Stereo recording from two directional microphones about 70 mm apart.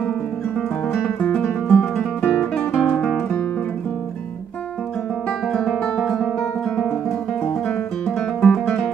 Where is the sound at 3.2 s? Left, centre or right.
Left.